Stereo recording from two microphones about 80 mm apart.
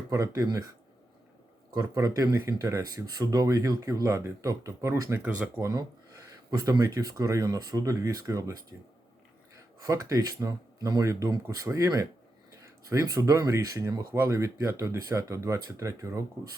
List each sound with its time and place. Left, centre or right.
0.1 s speech: right
1.7 s speech: right
5.2 s speech: right
6.5 s speech: right
9.8 s speech: right
11.0 s speech: right
12.9 s speech: right